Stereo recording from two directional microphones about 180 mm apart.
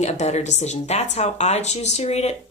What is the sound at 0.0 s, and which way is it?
Speech, 40° left (ahead or behind).